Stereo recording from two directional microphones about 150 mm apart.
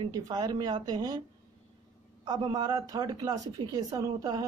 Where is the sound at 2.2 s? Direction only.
30° right (ahead or behind).